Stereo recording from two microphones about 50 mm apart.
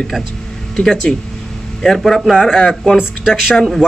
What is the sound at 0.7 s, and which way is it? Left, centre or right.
Speech, centre.